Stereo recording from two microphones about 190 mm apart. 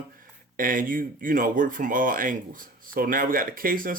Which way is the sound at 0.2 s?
45° right (ahead or behind).